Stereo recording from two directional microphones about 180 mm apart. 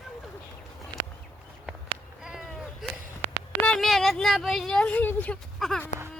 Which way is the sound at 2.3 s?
5° right (ahead or behind).